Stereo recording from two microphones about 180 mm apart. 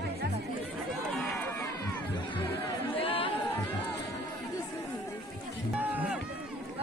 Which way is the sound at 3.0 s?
30° left (ahead or behind).